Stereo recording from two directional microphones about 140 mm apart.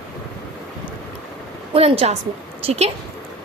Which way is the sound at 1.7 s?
45° right (ahead or behind).